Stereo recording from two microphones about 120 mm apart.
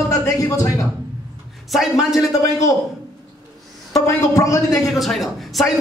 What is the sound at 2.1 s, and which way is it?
Speech, 30° left (ahead or behind).